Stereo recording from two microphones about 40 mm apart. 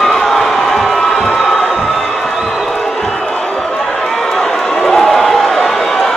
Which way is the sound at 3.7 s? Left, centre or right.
Centre.